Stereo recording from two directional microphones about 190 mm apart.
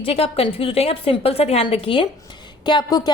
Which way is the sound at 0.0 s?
30° left (ahead or behind).